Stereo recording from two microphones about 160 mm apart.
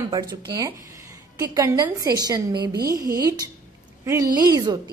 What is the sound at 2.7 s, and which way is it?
Speech, 70° right (ahead or behind).